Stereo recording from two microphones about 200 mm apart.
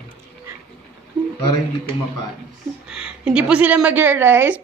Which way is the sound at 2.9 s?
5° right (ahead or behind).